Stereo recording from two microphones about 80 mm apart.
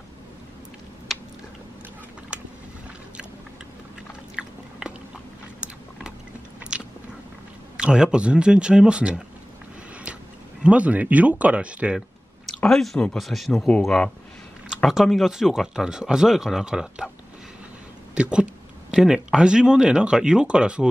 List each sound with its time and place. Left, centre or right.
1.1 s a sound: centre
2.3 s vehicle: centre
4.4 s biting: centre
6.6 s biting: centre
7.7 s speech: centre
10.6 s speech: centre
12.6 s speech: centre
14.9 s speech: centre
18.1 s speech: centre